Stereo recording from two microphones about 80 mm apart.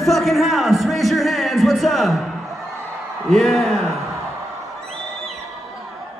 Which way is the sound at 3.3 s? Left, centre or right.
Centre.